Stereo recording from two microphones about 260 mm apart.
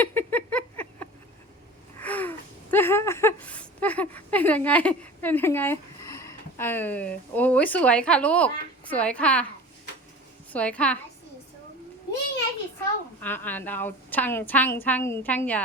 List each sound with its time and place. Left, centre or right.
0.0 s a sound: centre
2.0 s a woman's voice: centre
10.5 s a woman's voice: centre
12.8 s a woman's voice: centre